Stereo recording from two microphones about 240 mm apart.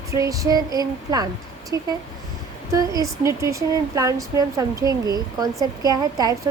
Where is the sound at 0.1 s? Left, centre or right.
Centre.